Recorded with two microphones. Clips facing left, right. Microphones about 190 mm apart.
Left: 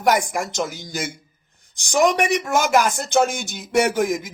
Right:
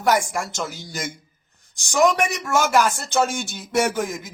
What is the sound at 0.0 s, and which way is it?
Speech, 15° left (ahead or behind).